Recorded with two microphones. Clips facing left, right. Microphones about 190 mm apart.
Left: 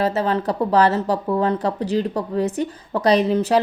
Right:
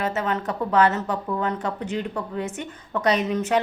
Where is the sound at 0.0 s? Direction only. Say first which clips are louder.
Left 5 dB; 35° left (ahead or behind).